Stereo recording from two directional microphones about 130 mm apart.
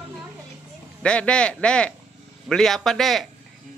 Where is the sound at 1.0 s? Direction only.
10° left (ahead or behind).